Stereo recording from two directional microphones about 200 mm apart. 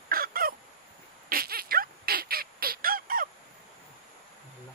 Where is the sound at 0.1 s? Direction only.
45° right (ahead or behind).